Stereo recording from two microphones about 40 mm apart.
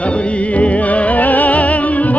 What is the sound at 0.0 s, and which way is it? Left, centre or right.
Music, left.